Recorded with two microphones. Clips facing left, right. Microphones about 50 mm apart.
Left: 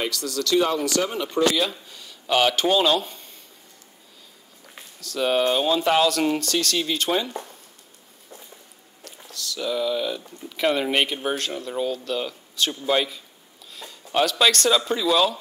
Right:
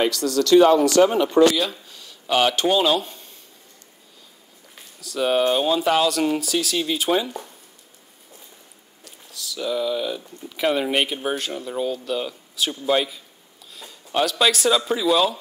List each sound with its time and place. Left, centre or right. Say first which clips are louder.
0.1 s speech: right 7 dB; right
0.8 s speech: right 8 dB; right
1.6 s speech: even; centre
5.0 s speech: right 1 dB; centre
9.0 s speech: left 2 dB; centre